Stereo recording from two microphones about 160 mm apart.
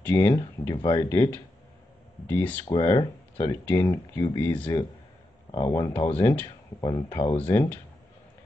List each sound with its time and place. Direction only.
0.0 s speech: 15° left (ahead or behind)
2.7 s speech: 30° left (ahead or behind)
3.3 s speech: 15° left (ahead or behind)
6.8 s speech: 25° left (ahead or behind)
7.4 s speech: 10° left (ahead or behind)